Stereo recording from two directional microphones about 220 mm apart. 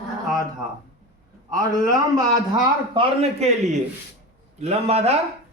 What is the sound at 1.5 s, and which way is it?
Speech, 15° right (ahead or behind).